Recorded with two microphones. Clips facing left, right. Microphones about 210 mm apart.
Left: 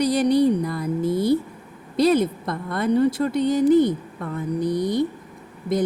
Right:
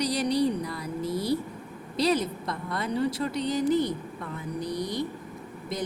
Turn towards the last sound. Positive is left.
turn(degrees=50)  # may be behind; listen again after turning